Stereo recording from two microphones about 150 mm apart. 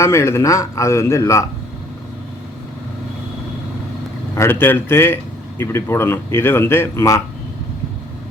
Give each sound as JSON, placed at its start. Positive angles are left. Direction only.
{"t": 0.0, "sound": "a man's voice", "side_deg": 15}
{"t": 4.4, "sound": "a man's voice", "side_deg": 15}